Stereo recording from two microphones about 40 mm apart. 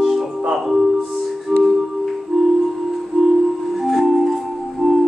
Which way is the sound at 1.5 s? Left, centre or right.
Centre.